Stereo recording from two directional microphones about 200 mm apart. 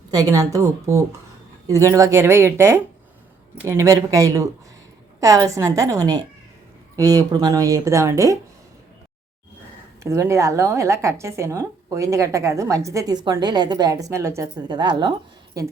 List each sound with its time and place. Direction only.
0.1 s a woman's voice: 15° right (ahead or behind)
10.0 s a woman's voice: 15° right (ahead or behind)